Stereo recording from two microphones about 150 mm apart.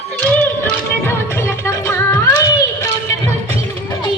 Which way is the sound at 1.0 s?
20° left (ahead or behind).